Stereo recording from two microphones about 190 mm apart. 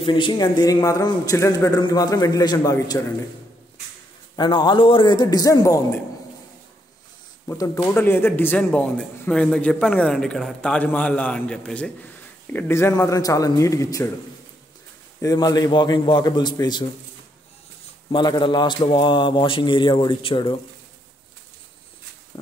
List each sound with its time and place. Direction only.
0.0 s speech: 25° left (ahead or behind)
4.4 s speech: 25° left (ahead or behind)
7.4 s a man's voice: 15° left (ahead or behind)
15.2 s speech: 20° left (ahead or behind)
18.1 s speech: 25° left (ahead or behind)